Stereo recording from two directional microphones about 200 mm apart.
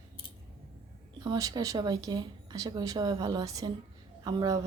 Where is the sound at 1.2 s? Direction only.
15° right (ahead or behind).